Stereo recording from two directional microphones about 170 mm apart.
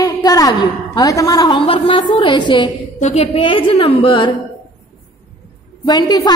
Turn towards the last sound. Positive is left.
turn(degrees=25)  # may be behind; listen again after turning